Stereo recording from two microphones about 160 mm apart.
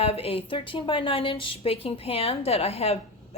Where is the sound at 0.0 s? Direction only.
40° left (ahead or behind).